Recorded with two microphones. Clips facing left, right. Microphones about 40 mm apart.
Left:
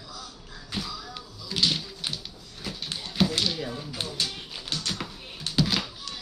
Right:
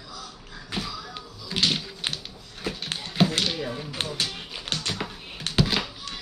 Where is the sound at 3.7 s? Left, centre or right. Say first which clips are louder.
Right 3 dB; right.